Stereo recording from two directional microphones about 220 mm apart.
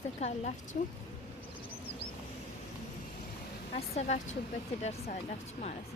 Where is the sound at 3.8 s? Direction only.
30° left (ahead or behind).